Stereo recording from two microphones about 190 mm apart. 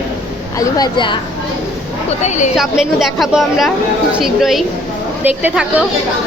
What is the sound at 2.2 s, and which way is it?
Speech, 40° left (ahead or behind).